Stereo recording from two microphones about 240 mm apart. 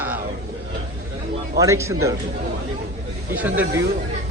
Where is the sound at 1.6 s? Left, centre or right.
Centre.